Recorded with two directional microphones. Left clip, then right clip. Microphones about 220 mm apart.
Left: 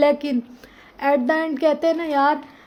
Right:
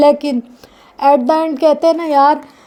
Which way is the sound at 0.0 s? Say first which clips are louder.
Right 7 dB; 25° right (ahead or behind).